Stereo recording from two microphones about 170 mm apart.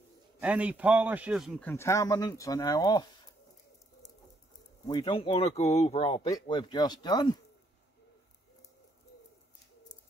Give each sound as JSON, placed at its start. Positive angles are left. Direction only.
{"t": 0.4, "sound": "a man's voice", "side_deg": -5}
{"t": 1.6, "sound": "speech", "side_deg": 15}
{"t": 4.8, "sound": "speech", "side_deg": 25}